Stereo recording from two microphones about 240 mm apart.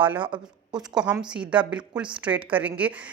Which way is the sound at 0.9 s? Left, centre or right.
Centre.